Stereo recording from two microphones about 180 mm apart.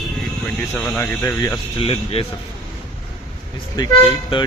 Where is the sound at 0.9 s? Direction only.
10° left (ahead or behind).